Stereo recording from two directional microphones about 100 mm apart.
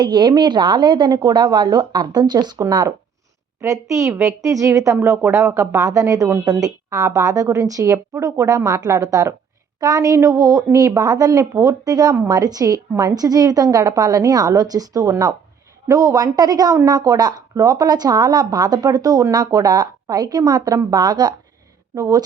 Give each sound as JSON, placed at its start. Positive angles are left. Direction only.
{"t": 0.0, "sound": "a woman's voice", "side_deg": -50}